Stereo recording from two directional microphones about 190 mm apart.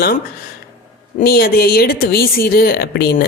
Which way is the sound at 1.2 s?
55° left (ahead or behind).